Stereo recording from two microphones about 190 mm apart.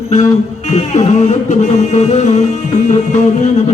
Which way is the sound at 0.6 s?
40° left (ahead or behind).